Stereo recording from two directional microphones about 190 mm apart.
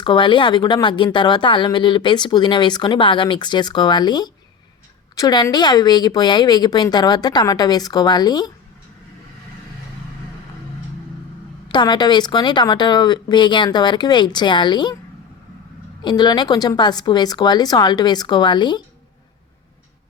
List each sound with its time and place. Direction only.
0.0 s speech: 25° left (ahead or behind)
11.7 s speech: 20° left (ahead or behind)
16.0 s speech: 20° left (ahead or behind)